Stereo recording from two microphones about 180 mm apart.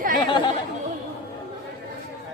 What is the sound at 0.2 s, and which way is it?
Chatter, 25° left (ahead or behind).